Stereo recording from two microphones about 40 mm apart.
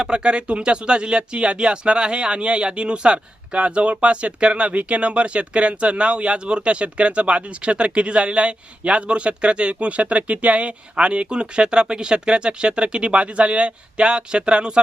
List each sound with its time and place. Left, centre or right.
0.0 s speech: right